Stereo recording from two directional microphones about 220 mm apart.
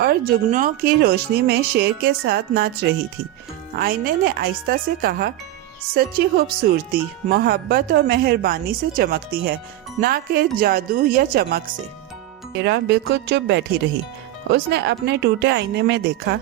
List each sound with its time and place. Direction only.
0.0 s speech: 45° right (ahead or behind)
3.8 s speech: 45° right (ahead or behind)
12.6 s speech: 50° right (ahead or behind)